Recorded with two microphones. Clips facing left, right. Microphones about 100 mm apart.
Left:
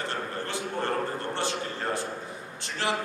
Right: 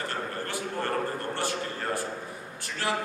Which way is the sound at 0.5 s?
25° left (ahead or behind).